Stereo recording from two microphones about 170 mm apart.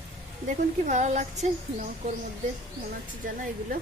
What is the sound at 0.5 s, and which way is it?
A woman's voice, 45° right (ahead or behind).